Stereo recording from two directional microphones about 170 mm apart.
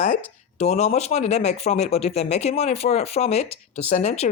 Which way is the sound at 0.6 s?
40° left (ahead or behind).